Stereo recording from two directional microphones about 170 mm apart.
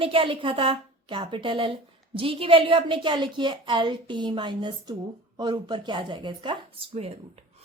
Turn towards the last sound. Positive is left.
turn(degrees=-35)  # may be behind; listen again after turning